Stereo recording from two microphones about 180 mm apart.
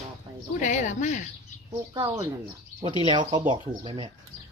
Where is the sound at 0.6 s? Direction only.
40° left (ahead or behind).